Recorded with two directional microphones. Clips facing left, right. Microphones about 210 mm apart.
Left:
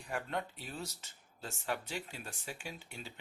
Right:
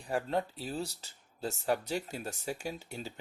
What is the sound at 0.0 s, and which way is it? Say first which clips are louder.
Speech: right 6 dB; 35° right (ahead or behind).